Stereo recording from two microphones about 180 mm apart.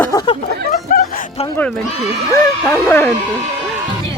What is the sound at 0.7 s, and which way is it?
Music, 55° left (ahead or behind).